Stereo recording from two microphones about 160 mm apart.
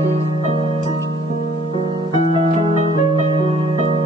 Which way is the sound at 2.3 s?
40° right (ahead or behind).